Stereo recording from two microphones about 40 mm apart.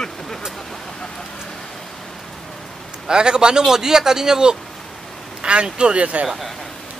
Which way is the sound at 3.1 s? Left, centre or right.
Right.